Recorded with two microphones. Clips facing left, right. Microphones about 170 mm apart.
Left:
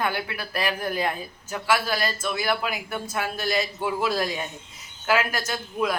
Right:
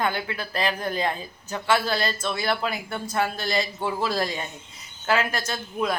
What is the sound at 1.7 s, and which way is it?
Speech, 25° right (ahead or behind).